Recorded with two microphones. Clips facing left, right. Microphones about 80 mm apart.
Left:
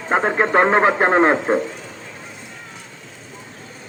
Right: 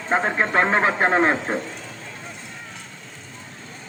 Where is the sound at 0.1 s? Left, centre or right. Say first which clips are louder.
Left 4 dB; centre.